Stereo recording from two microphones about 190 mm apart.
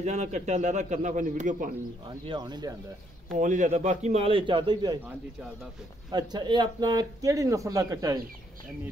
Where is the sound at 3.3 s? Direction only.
40° right (ahead or behind); by 5.0 s 25° right (ahead or behind).